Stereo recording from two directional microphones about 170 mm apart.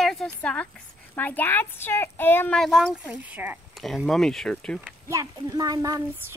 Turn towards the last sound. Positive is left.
turn(degrees=-20)  # may be behind; listen again after turning